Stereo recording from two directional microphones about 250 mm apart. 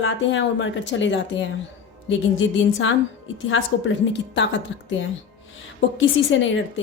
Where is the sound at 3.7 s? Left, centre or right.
Left.